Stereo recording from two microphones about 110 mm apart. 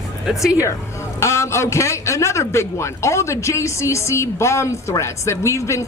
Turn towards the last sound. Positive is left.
turn(degrees=25)  # may be behind; listen again after turning